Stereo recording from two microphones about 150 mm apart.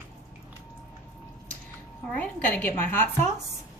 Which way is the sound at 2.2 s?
10° left (ahead or behind).